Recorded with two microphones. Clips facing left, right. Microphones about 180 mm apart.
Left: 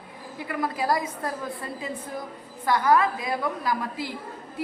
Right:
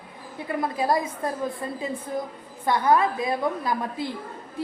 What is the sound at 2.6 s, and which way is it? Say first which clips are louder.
A woman's voice: right 1 dB; 25° right (ahead or behind).